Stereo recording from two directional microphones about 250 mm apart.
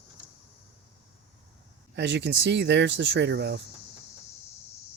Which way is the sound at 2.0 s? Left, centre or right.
Right.